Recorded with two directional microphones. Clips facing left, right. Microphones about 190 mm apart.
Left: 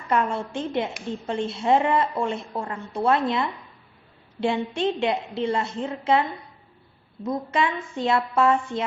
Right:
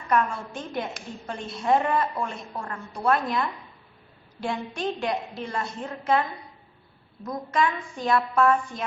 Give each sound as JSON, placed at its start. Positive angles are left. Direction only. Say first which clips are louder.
{"t": 0.1, "sound": "a woman's voice", "louder": "left 1 dB", "side_deg": 25}
{"t": 7.3, "sound": "a woman's voice", "louder": "left 1 dB", "side_deg": 25}